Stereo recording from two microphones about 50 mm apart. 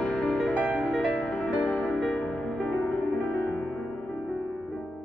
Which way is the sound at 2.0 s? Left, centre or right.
Centre.